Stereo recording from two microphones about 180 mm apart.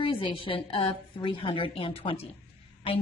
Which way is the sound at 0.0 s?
30° left (ahead or behind).